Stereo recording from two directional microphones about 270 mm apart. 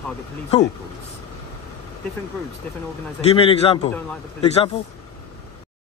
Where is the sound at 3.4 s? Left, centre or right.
Left.